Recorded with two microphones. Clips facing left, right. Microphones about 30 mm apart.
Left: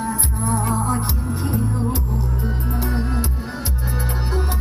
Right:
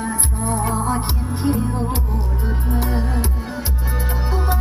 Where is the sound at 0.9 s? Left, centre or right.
Right.